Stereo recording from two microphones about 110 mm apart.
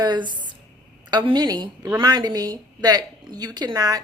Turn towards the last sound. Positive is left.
turn(degrees=-35)  # may be behind; listen again after turning